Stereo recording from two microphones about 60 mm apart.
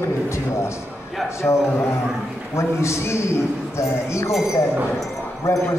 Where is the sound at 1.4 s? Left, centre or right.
Left.